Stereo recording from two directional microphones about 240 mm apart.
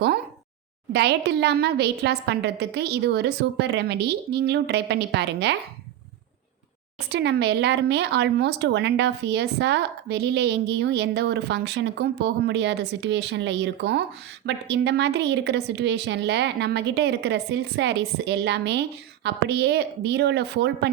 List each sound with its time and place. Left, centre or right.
0.9 s speech: right
7.1 s speech: right